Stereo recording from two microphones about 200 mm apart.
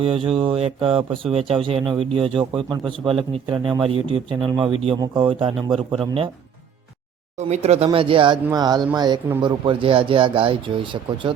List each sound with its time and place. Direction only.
0.0 s speech: 25° right (ahead or behind)
7.3 s speech: 35° right (ahead or behind)